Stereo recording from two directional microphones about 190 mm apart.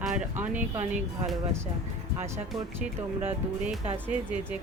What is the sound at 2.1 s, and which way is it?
Speech, 15° right (ahead or behind).